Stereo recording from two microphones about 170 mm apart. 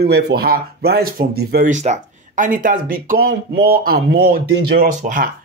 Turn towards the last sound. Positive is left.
turn(degrees=-50)  # may be behind; listen again after turning